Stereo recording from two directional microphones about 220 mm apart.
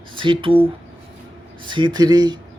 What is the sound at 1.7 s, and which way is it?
Speech, 20° right (ahead or behind).